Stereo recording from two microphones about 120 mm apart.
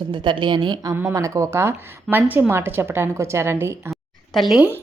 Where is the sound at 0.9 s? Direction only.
20° right (ahead or behind).